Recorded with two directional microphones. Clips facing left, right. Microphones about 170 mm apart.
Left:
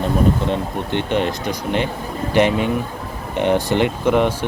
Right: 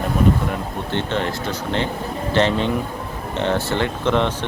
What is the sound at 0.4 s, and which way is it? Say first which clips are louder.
Speech: left 4 dB; 20° left (ahead or behind).